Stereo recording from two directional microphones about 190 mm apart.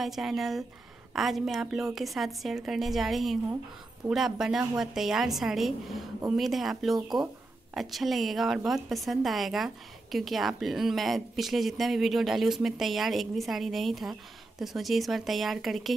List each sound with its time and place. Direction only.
0.0 s a woman's voice: centre (ahead or behind)
7.0 s speech: 20° right (ahead or behind)
7.7 s a woman's voice: centre (ahead or behind)